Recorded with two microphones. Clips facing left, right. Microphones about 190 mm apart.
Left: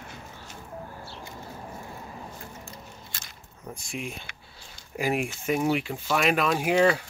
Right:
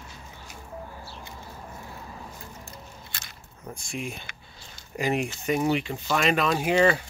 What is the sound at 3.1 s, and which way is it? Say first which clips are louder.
Biting: right 1 dB; 70° right (ahead or behind).